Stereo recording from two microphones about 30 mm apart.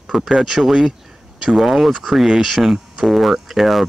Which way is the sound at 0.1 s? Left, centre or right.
Centre.